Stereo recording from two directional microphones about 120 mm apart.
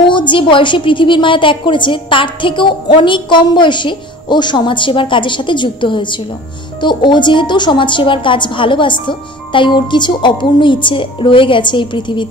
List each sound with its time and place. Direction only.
0.0 s a woman's voice: 40° left (ahead or behind)